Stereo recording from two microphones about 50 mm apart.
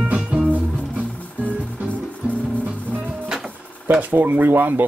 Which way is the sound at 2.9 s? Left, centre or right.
Right.